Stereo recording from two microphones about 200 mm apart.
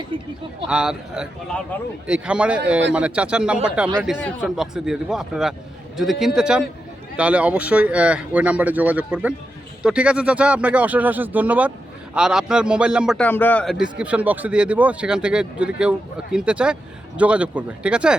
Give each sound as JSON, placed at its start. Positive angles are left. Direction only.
{"t": 0.7, "sound": "speech", "side_deg": -5}
{"t": 13.2, "sound": "speech", "side_deg": 10}